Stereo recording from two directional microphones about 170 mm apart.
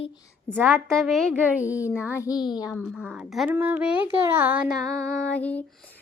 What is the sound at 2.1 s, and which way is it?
Speech, 20° left (ahead or behind).